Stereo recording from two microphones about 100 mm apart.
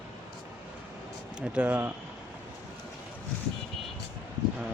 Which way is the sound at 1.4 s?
15° right (ahead or behind).